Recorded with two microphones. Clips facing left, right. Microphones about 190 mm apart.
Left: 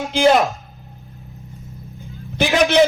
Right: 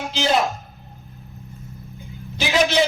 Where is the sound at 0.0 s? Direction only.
55° left (ahead or behind).